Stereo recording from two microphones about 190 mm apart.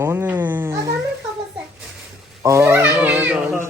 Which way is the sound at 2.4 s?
15° right (ahead or behind).